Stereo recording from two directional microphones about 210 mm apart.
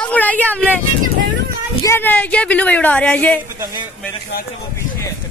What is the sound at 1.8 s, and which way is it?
Speech, 10° left (ahead or behind).